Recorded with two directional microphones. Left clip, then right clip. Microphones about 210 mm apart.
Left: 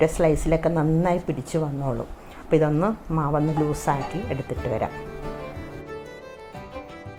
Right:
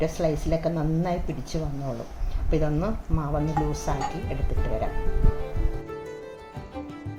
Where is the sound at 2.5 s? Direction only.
25° left (ahead or behind).